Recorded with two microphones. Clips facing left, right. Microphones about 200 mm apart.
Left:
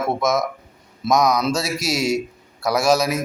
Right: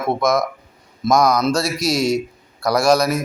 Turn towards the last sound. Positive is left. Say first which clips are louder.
# right 2 dB
turn(degrees=5)  # may be behind; listen again after turning